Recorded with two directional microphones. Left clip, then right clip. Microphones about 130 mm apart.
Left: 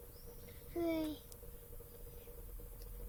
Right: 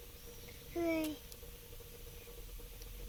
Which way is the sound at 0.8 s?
10° left (ahead or behind).